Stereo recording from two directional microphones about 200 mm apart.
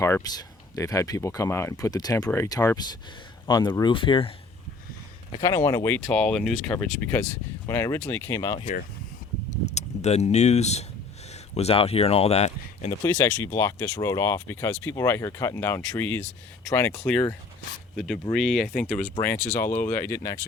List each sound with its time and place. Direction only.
0.0 s speech: 15° left (ahead or behind)
5.4 s speech: 15° left (ahead or behind)
8.5 s speech: 40° left (ahead or behind)
13.1 s speech: 10° left (ahead or behind)